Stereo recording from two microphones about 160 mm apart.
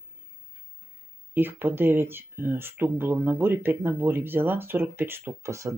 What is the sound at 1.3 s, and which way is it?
Speech, 10° right (ahead or behind).